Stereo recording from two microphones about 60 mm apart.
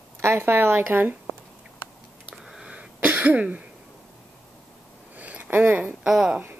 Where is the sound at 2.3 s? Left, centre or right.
Centre.